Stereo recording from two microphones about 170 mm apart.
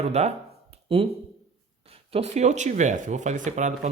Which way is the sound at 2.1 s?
40° right (ahead or behind).